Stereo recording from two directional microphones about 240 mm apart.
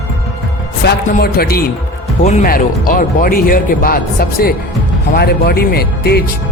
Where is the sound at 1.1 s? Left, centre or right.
Left.